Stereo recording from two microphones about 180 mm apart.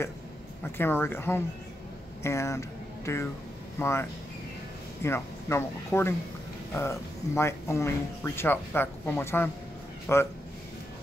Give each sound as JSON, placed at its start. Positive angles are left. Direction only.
{"t": 0.7, "sound": "speech", "side_deg": 10}
{"t": 3.8, "sound": "speech", "side_deg": 15}